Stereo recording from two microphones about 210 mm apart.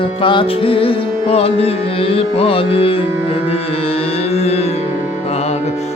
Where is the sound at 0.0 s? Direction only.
25° left (ahead or behind).